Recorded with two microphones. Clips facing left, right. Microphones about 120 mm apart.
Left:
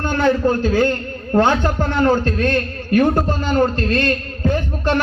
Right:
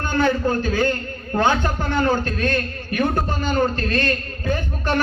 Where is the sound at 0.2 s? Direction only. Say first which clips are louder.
Left 3 dB; 35° left (ahead or behind).